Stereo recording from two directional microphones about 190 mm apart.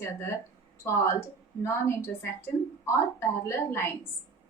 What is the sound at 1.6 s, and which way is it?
A woman's voice, 15° left (ahead or behind).